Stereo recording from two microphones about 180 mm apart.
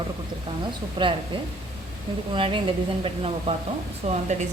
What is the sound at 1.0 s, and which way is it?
Speech, 25° right (ahead or behind).